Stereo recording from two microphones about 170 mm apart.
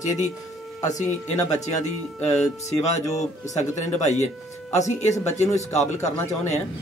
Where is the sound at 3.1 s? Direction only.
45° left (ahead or behind).